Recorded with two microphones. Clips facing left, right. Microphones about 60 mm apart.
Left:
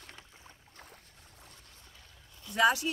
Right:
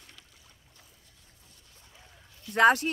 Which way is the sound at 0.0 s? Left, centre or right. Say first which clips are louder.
Left 4 dB; left.